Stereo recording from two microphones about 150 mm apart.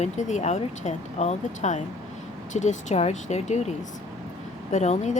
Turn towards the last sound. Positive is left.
turn(degrees=50)  # may be behind; listen again after turning